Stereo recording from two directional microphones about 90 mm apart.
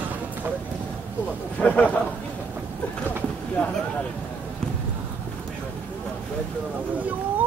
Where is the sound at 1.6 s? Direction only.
15° left (ahead or behind).